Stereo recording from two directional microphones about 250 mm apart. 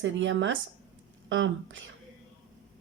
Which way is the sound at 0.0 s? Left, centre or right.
Right.